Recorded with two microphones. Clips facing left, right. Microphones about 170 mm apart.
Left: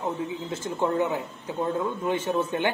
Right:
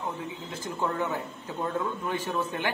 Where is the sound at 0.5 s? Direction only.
25° left (ahead or behind).